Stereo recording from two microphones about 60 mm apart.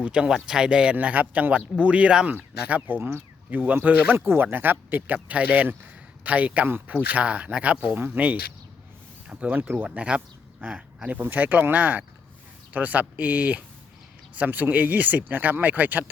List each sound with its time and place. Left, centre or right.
0.0 s speech: centre
0.9 s speech: right
3.0 s speech: right
3.5 s speech: right